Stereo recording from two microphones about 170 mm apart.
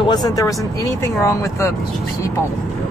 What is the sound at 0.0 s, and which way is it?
Speech, 25° left (ahead or behind).